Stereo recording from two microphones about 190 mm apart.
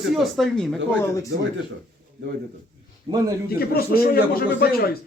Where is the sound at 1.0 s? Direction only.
15° left (ahead or behind).